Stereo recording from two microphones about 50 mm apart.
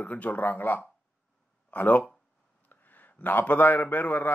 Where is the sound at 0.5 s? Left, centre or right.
Left.